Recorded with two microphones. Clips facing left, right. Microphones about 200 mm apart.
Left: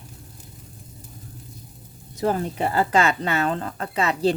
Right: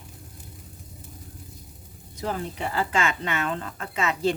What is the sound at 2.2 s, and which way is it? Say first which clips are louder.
Speech: left 7 dB; 45° left (ahead or behind).